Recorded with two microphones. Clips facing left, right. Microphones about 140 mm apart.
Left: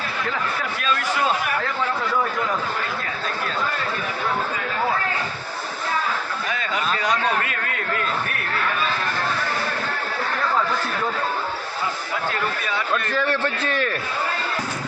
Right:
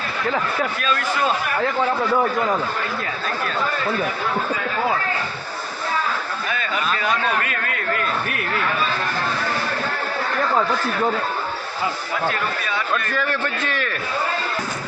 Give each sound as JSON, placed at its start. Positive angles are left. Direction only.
{"t": 6.9, "sound": "a man's voice", "side_deg": 20}
{"t": 13.0, "sound": "a man's voice", "side_deg": 25}